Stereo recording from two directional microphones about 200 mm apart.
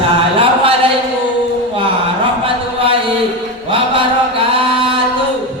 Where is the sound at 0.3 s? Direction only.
25° right (ahead or behind).